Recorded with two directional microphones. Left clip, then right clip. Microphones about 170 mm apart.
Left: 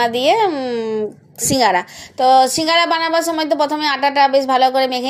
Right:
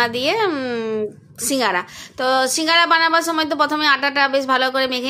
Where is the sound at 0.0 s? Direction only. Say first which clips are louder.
Left 4 dB; 5° left (ahead or behind).